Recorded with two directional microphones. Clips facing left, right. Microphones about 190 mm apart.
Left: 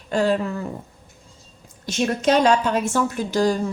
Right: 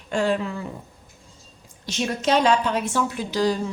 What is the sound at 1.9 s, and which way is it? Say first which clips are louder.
A woman's voice: left 3 dB; 45° left (ahead or behind).